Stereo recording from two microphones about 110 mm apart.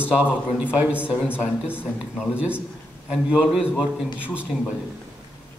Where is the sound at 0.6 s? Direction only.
10° right (ahead or behind).